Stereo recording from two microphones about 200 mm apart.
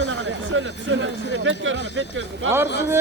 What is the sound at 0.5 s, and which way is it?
Speech, 80° right.